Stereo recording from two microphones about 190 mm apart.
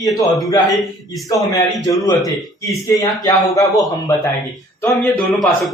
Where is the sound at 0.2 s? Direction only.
15° left (ahead or behind).